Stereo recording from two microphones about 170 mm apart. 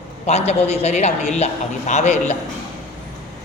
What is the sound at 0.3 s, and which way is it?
A man's voice, 40° left (ahead or behind).